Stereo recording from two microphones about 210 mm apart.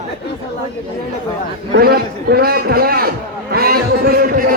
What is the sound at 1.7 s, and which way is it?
A man's voice, 50° right (ahead or behind).